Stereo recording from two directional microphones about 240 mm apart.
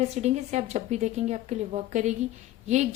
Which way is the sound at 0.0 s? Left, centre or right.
Right.